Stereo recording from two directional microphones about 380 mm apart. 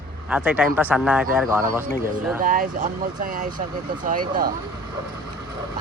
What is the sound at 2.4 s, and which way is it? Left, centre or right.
Speech, right.